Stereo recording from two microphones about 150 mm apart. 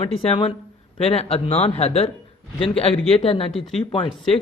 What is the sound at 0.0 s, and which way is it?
Speech, 35° left (ahead or behind).